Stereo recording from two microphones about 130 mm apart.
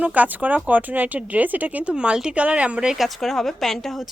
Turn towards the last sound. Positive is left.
turn(degrees=0)  # may be behind; listen again after turning